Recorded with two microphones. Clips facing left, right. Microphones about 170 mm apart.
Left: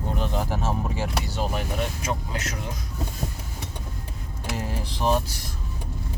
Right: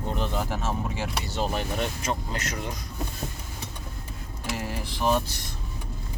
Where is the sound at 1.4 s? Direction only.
5° left (ahead or behind).